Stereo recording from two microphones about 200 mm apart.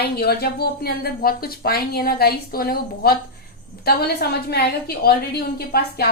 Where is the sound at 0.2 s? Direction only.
50° left (ahead or behind).